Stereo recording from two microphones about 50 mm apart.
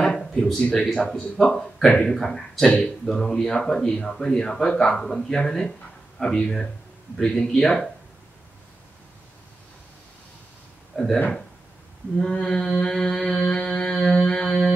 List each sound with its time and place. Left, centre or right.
0.0 s a sound: centre
0.9 s speech: centre
2.1 s speech: centre
10.9 s speech: centre
12.2 s speech: centre
14.1 s music: centre